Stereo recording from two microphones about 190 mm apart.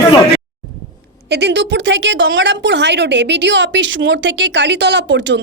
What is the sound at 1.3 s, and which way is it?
A woman's voice, 65° right (ahead or behind).